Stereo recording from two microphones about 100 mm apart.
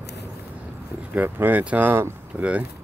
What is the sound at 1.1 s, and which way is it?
Speech, 20° right (ahead or behind).